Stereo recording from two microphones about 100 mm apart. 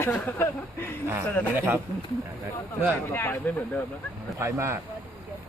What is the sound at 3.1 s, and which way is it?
Speech, 20° left (ahead or behind).